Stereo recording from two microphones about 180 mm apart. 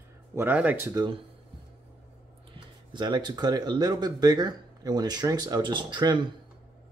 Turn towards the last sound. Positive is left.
turn(degrees=-25)  # may be behind; listen again after turning